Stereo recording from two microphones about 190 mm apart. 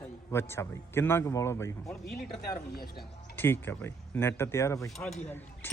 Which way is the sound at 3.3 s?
10° left (ahead or behind).